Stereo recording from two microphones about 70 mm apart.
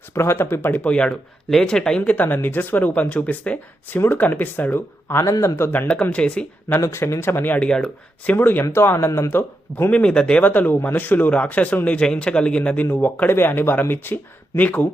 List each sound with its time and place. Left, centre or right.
0.1 s speech: left; by 2.0 s centre
2.0 s speech: left
5.2 s speech: left
5.5 s speech: left
5.9 s speech: centre
6.7 s speech: left
8.6 s speech: left
9.9 s speech: centre
10.4 s speech: left